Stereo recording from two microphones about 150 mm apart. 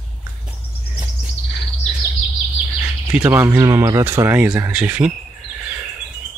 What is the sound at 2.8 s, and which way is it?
Speech, 10° right (ahead or behind).